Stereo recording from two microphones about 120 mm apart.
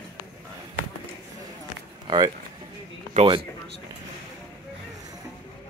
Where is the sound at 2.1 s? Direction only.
40° right (ahead or behind).